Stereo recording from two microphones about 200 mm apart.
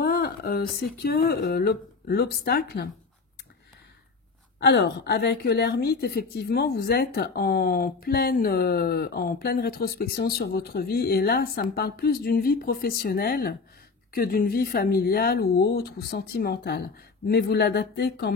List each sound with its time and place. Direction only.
0.0 s a sound: 50° left (ahead or behind)
0.9 s a woman's voice: 50° left (ahead or behind)
4.6 s a woman's voice: 60° left (ahead or behind)